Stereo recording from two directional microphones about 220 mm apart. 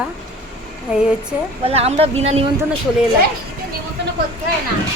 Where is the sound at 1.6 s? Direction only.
25° right (ahead or behind).